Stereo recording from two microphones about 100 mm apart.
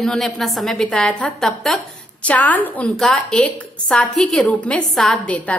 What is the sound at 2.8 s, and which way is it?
A woman's voice, 5° left (ahead or behind).